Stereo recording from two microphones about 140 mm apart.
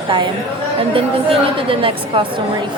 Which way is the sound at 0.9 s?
40° right (ahead or behind).